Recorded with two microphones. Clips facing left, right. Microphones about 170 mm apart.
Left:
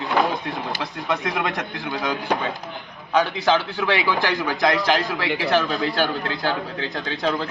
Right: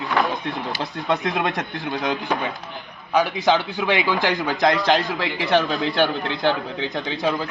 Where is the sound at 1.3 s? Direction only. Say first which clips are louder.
Right 2 dB; 20° right (ahead or behind).